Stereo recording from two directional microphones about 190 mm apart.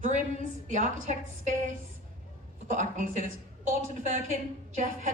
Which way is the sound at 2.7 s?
40° right (ahead or behind).